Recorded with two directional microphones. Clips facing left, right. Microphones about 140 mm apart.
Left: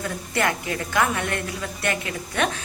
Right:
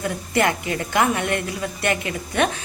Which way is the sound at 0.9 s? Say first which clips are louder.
Right 3 dB; 20° right (ahead or behind).